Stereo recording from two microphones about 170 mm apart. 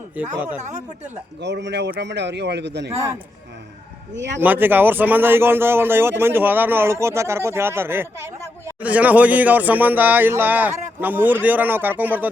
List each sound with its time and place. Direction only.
0.2 s speech: 10° right (ahead or behind)
0.6 s speech: 40° right (ahead or behind)
1.4 s a man's voice: 90° right
4.1 s a man's voice: 90° right
4.4 s speech: 10° right (ahead or behind)